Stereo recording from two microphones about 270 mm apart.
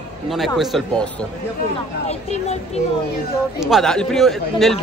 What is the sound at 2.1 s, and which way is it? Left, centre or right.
Speech, left.